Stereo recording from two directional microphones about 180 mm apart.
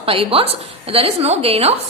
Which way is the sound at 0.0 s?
30° right (ahead or behind).